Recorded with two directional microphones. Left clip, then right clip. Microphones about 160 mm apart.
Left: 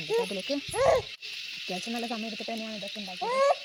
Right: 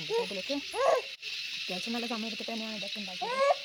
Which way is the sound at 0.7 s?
30° left (ahead or behind).